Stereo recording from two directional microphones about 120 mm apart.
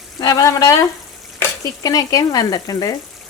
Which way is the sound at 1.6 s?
30° left (ahead or behind).